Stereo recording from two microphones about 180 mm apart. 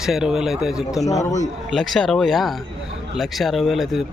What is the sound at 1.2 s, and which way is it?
Speech, 40° left (ahead or behind).